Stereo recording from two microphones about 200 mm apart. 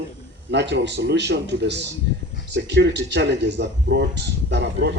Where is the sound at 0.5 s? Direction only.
60° right (ahead or behind).